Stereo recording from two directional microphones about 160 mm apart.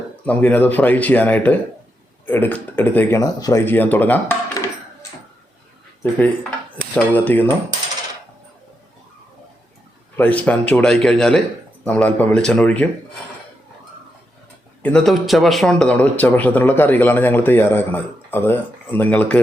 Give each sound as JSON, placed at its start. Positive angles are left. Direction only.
{"t": 0.3, "sound": "speech", "side_deg": 10}
{"t": 6.0, "sound": "speech", "side_deg": 10}
{"t": 10.2, "sound": "speech", "side_deg": 10}
{"t": 14.8, "sound": "speech", "side_deg": 5}